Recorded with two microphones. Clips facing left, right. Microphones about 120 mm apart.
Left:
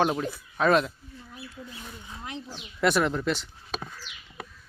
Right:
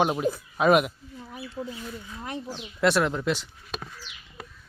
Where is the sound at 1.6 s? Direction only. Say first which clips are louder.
Right 11 dB; 75° right (ahead or behind).